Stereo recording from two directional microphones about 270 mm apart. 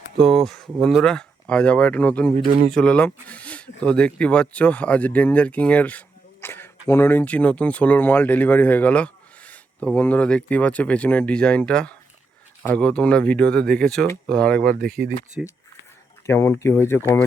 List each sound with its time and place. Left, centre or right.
0.3 s speech: centre
2.3 s speech: right
2.6 s speech: centre
14.8 s speech: right
16.2 s speech: centre